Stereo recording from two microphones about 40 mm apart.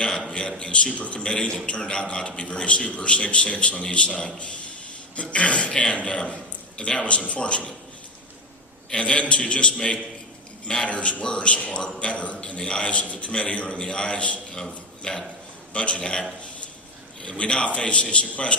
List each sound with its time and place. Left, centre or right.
0.3 s a man's voice: left
8.9 s a man's voice: left
14.5 s speech: centre
15.7 s a man's voice: left
17.2 s a man's voice: left